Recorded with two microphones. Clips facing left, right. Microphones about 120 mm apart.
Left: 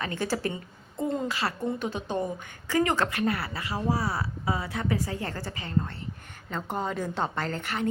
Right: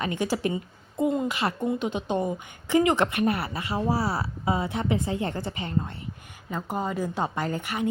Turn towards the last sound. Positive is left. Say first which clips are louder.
# right 2 dB
turn(degrees=-10)  # may be behind; listen again after turning